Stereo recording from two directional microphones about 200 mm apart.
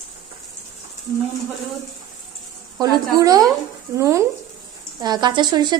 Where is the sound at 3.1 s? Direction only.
20° right (ahead or behind).